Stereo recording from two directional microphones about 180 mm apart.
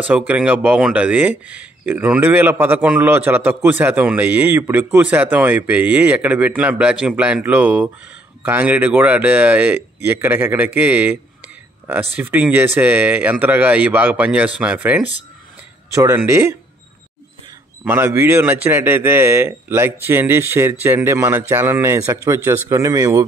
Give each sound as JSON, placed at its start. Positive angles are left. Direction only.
{"t": 0.1, "sound": "speech", "side_deg": -10}
{"t": 17.8, "sound": "speech", "side_deg": -10}